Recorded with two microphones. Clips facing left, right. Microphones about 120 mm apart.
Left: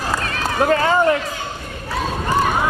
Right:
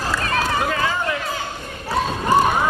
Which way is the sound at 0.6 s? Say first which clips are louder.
Left 7 dB; 45° left (ahead or behind).